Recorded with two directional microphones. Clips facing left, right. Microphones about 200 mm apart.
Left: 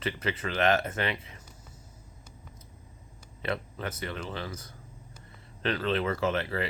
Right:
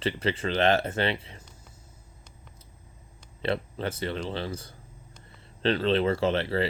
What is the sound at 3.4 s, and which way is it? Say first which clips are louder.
Speech: right 4 dB; 30° right (ahead or behind).